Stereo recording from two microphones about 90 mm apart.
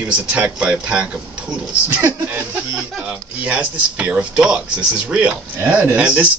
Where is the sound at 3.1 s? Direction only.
15° right (ahead or behind).